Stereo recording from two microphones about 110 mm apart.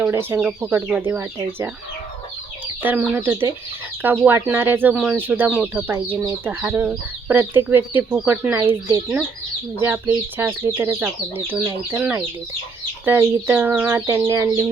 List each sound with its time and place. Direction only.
0.1 s speech: 20° right (ahead or behind)
2.8 s speech: 15° right (ahead or behind)
9.8 s speech: 15° right (ahead or behind)
14.2 s speech: 30° right (ahead or behind)
14.4 s speech: 15° right (ahead or behind)